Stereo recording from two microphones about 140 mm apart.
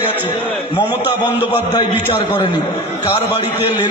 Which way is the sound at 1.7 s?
30° left (ahead or behind).